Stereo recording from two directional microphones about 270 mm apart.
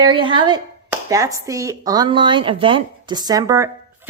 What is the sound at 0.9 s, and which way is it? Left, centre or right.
Speech, centre.